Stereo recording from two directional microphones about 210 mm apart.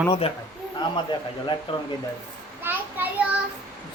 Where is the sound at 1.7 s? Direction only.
25° left (ahead or behind).